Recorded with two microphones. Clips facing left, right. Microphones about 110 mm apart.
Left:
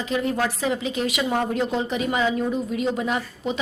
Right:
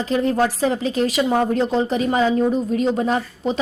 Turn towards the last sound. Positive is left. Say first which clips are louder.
# right 5 dB
turn(degrees=-35)  # may be behind; listen again after turning